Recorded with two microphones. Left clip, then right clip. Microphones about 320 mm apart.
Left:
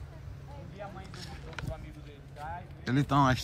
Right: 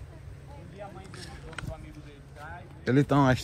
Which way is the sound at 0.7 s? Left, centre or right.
Left.